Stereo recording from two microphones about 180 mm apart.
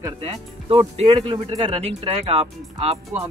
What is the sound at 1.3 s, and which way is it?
Speech, 35° right (ahead or behind).